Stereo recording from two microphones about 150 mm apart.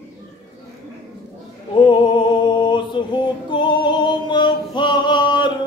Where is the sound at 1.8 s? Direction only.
30° left (ahead or behind).